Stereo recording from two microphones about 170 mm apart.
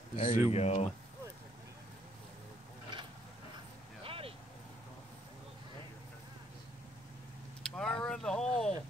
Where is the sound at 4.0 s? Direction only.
35° right (ahead or behind).